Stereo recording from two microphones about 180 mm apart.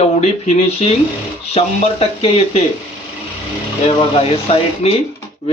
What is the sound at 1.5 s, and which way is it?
A man's voice, 35° left (ahead or behind).